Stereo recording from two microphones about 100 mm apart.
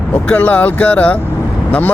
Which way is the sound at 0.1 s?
15° left (ahead or behind).